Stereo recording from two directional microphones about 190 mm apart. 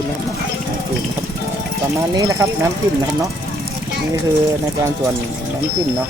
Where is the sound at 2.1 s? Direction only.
15° right (ahead or behind).